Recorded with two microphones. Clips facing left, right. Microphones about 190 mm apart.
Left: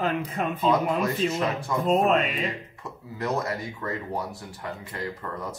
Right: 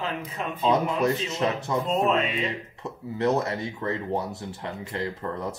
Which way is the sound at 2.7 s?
25° right (ahead or behind).